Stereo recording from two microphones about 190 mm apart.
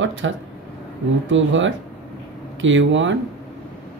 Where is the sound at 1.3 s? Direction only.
85° right.